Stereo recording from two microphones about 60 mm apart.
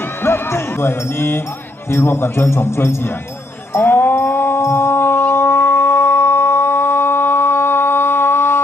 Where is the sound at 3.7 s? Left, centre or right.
Left.